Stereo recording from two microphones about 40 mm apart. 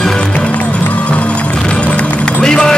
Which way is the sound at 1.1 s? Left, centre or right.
Left.